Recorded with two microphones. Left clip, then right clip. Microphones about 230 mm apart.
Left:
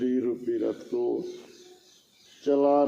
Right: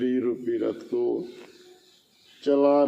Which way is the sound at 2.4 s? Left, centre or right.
Right.